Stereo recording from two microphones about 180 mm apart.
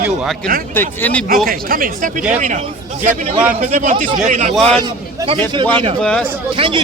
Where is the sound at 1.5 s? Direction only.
50° right (ahead or behind).